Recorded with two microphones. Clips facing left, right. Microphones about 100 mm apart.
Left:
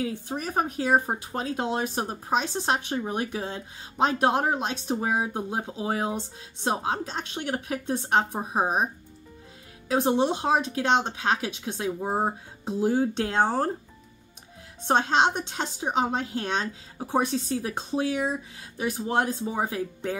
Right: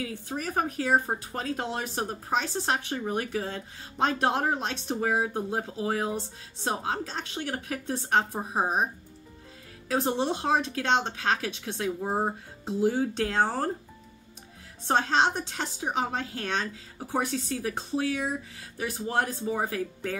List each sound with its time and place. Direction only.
0.0 s speech: 25° left (ahead or behind)
9.8 s speech: 15° left (ahead or behind)
14.9 s a woman's voice: 20° left (ahead or behind)